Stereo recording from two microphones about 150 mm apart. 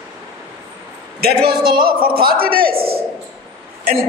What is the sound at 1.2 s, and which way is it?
A man's voice, 90° right.